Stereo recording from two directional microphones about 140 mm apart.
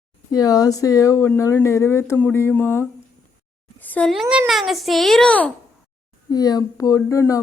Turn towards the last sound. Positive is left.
turn(degrees=25)  # may be behind; listen again after turning